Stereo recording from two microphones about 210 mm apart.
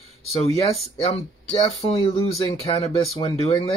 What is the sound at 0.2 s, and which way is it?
Speech, 30° left (ahead or behind).